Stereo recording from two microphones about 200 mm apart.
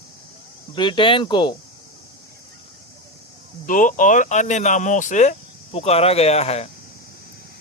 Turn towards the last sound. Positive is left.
turn(degrees=30)  # may be behind; listen again after turning